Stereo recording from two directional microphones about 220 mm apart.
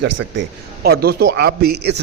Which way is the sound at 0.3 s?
45° right (ahead or behind).